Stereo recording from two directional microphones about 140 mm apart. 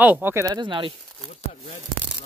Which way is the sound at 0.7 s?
35° right (ahead or behind).